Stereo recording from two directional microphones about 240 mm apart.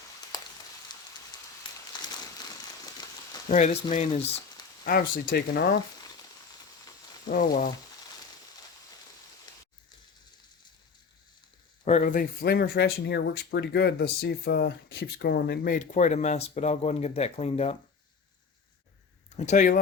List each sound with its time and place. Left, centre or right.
0.9 s a sound: centre
3.9 s speech: left
7.3 s speech: left
11.9 s speech: left
19.4 s speech: left